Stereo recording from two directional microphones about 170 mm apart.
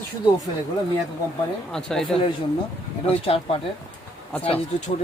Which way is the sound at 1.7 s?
5° left (ahead or behind).